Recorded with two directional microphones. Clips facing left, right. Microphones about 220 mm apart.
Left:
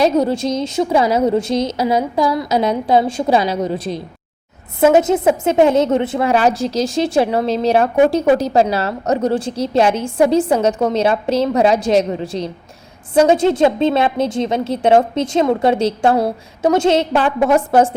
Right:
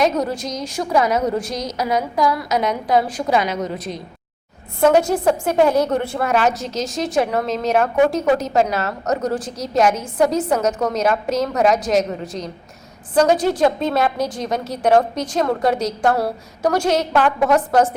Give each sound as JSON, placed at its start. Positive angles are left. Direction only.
{"t": 0.0, "sound": "a woman's voice", "side_deg": 30}
{"t": 6.3, "sound": "a woman's voice", "side_deg": 30}